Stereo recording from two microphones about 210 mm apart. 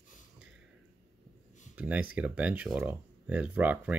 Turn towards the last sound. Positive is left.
turn(degrees=-10)  # may be behind; listen again after turning